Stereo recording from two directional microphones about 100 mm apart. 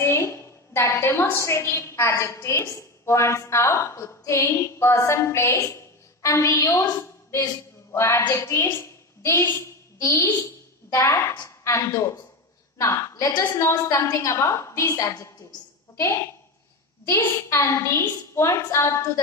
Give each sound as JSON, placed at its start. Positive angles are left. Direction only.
{"t": 0.0, "sound": "a sound", "side_deg": 25}
{"t": 0.7, "sound": "a woman's voice", "side_deg": 25}
{"t": 10.0, "sound": "a woman's voice", "side_deg": 35}